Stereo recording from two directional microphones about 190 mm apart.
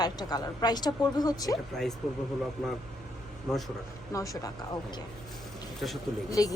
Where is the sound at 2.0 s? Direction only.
Centre (ahead or behind).